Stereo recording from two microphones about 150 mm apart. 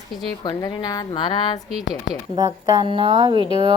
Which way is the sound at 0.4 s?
25° left (ahead or behind).